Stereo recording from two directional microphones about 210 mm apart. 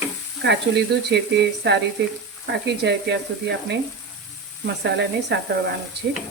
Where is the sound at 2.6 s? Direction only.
55° right (ahead or behind).